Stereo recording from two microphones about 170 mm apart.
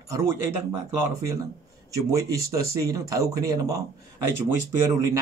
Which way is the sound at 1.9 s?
20° right (ahead or behind).